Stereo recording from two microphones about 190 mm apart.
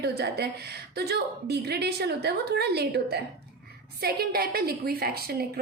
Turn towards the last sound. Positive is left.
turn(degrees=-55)  # may be behind; listen again after turning